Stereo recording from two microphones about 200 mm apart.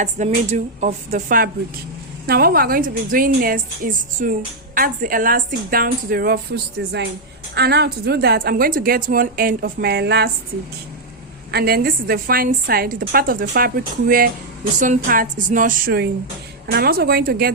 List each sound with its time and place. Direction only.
0.0 s a woman's voice: 35° right (ahead or behind)
2.2 s a woman's voice: 50° right (ahead or behind)
11.5 s a woman's voice: 50° right (ahead or behind)